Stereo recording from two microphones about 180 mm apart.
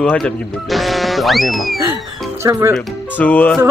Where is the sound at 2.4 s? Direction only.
15° right (ahead or behind).